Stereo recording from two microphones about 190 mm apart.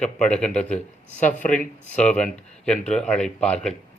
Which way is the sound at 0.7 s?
40° left (ahead or behind).